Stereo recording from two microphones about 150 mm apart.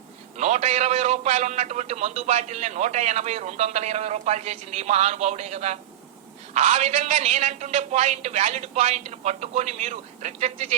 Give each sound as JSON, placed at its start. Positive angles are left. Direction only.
{"t": 0.3, "sound": "a man's voice", "side_deg": -50}